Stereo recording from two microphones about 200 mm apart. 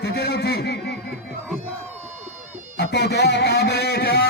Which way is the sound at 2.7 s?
55° left (ahead or behind).